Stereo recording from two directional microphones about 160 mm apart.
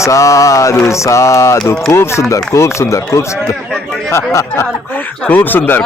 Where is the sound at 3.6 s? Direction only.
5° left (ahead or behind).